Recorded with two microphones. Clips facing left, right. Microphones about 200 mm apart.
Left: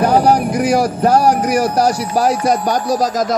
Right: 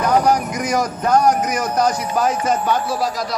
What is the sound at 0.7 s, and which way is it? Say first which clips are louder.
A man's voice: left 4 dB; 30° left (ahead or behind).